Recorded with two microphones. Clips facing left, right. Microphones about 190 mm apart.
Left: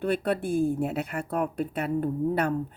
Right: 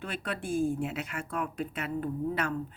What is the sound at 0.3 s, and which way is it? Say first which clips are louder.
Speech: left 1 dB; 60° left (ahead or behind).